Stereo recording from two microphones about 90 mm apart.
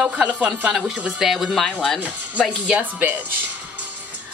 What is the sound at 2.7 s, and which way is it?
Speech, 20° right (ahead or behind).